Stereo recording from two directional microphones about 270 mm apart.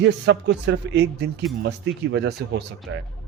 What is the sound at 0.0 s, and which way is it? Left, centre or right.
Speech, right.